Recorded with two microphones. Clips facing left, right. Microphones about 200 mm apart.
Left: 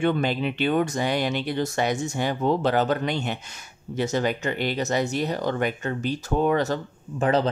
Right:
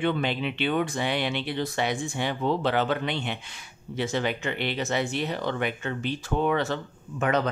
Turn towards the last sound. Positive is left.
turn(degrees=30)  # may be behind; listen again after turning